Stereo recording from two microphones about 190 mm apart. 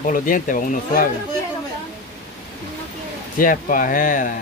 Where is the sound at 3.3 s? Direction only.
45° left (ahead or behind).